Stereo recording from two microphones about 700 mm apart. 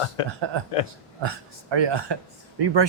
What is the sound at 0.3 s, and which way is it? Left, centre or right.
Speech, right.